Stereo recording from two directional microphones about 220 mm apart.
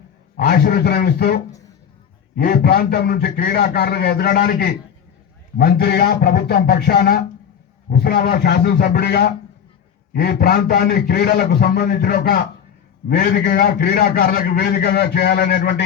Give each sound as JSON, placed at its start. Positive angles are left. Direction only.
{"t": 0.3, "sound": "a man's voice", "side_deg": 45}